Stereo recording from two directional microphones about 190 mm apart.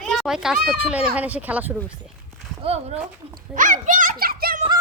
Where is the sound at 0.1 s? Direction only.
Centre (ahead or behind).